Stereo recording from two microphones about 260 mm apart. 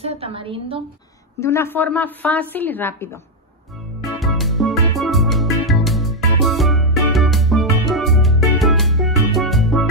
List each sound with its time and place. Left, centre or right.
0.0 s a woman's voice: right
1.4 s a woman's voice: centre
4.2 s music: centre